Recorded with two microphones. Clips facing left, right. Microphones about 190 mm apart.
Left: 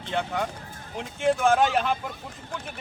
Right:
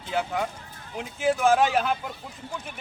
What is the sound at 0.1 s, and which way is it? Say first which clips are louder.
Speech: right 1 dB; 5° right (ahead or behind).